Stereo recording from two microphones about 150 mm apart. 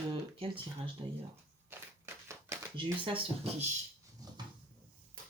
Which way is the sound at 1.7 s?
15° right (ahead or behind).